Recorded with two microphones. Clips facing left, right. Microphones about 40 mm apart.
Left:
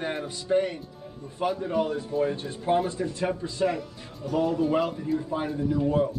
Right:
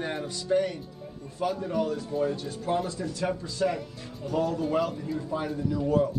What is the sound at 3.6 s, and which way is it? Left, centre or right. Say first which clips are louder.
Speech: left 1 dB; centre.